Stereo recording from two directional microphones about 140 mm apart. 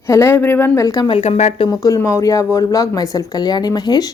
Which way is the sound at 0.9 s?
30° left (ahead or behind).